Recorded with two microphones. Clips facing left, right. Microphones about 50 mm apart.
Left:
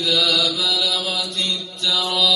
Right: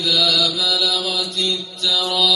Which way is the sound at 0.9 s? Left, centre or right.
Left.